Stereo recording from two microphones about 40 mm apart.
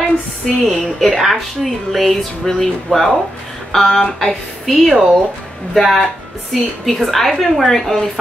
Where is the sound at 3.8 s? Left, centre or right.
Centre.